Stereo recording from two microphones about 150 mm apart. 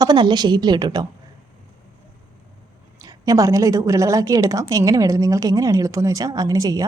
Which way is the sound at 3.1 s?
25° right (ahead or behind).